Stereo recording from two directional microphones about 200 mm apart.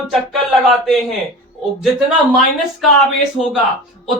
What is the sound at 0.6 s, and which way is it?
Speech, centre (ahead or behind).